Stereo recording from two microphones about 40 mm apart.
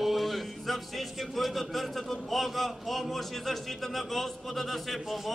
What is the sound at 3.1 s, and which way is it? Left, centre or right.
A man's voice, centre.